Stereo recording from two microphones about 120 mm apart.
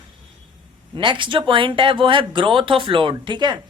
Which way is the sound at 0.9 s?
45° right (ahead or behind).